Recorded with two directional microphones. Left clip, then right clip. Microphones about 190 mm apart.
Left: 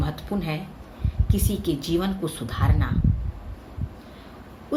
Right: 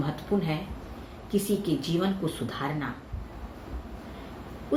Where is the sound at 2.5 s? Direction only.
65° left (ahead or behind).